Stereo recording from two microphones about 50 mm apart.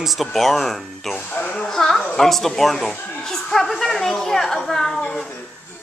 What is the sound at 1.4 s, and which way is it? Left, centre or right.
Speech, left.